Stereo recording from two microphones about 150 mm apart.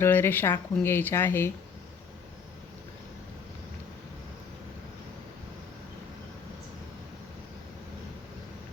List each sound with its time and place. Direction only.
0.0 s speech: 15° left (ahead or behind)